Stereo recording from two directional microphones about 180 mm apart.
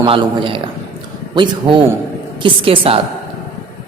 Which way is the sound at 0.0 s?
30° right (ahead or behind).